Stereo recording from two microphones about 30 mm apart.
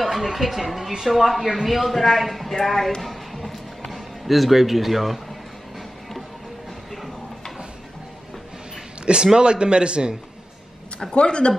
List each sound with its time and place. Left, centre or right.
0.0 s speech: centre
3.0 s a sound: centre
9.0 s a man's voice: right
11.0 s speech: left